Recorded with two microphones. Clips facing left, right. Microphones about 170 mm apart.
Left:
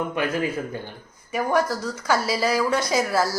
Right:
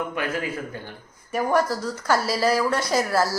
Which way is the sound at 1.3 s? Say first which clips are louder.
Even; 5° left (ahead or behind).